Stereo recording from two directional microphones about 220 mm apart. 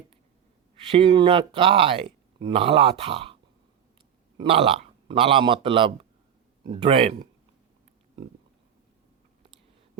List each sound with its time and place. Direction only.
0.8 s speech: 25° right (ahead or behind)
4.4 s a man's voice: 25° right (ahead or behind)